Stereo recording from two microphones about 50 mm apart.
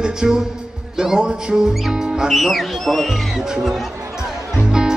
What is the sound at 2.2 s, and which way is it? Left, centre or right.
Speech, centre.